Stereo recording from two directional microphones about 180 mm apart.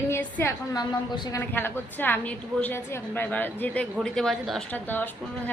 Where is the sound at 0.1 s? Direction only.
10° left (ahead or behind).